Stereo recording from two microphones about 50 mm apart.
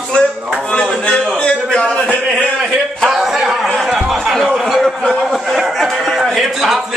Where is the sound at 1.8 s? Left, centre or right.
Left.